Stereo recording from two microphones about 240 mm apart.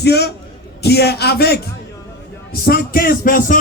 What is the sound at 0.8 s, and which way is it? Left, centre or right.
Speech, left.